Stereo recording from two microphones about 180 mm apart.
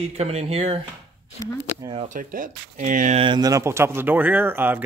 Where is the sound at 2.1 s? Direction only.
50° right (ahead or behind).